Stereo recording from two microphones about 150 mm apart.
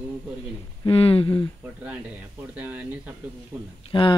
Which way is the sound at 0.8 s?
40° left (ahead or behind).